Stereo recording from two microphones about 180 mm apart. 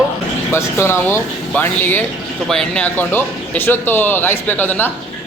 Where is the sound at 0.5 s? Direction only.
15° left (ahead or behind).